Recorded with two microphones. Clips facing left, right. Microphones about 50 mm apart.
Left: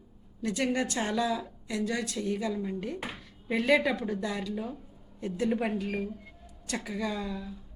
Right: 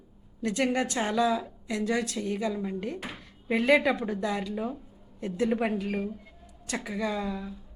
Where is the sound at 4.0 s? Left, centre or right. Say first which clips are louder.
Right 3 dB; right.